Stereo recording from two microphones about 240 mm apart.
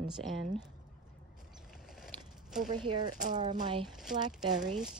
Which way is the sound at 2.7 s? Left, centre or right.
Centre.